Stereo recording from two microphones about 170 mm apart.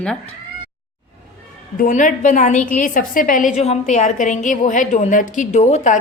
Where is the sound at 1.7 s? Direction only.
50° left (ahead or behind).